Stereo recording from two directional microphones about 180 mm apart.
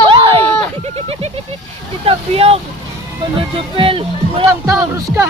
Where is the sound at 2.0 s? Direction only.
35° right (ahead or behind).